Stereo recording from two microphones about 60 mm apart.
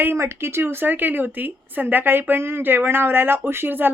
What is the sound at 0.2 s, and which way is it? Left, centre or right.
A woman's voice, right.